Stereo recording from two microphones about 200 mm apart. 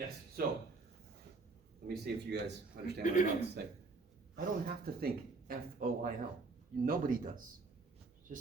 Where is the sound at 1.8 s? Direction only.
55° right (ahead or behind).